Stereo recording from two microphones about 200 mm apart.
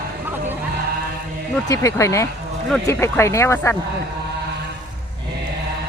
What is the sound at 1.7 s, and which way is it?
Speech, 15° left (ahead or behind).